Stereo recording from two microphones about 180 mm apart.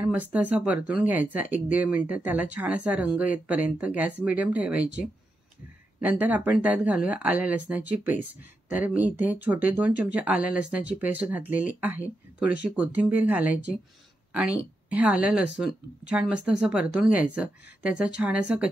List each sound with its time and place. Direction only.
0.0 s speech: 10° right (ahead or behind)